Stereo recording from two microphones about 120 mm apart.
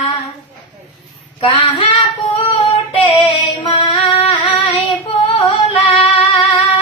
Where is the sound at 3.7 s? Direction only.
50° left (ahead or behind).